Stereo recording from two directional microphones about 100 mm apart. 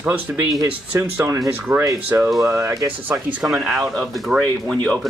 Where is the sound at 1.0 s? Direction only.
25° right (ahead or behind).